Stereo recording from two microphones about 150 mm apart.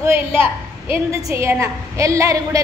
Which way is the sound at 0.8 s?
15° right (ahead or behind).